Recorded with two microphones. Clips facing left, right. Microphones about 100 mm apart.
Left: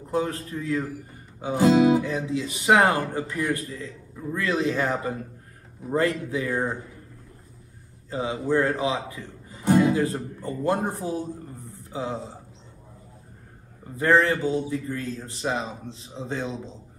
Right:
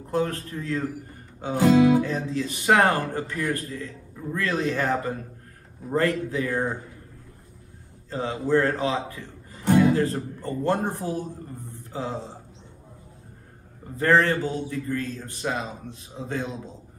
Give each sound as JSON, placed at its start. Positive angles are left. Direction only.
{"t": 0.1, "sound": "speech", "side_deg": 15}
{"t": 8.1, "sound": "speech", "side_deg": 15}
{"t": 13.9, "sound": "speech", "side_deg": 15}